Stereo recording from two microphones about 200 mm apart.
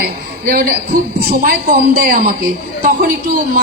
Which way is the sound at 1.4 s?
45° right (ahead or behind).